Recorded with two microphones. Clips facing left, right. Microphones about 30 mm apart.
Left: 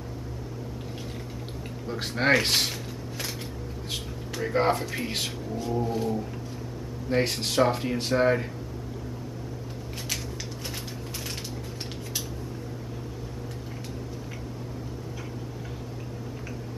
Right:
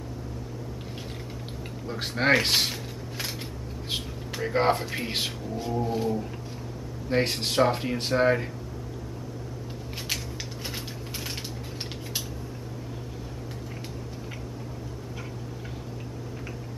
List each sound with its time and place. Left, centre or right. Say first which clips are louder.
1.9 s speech: even; centre
4.4 s speech: even; centre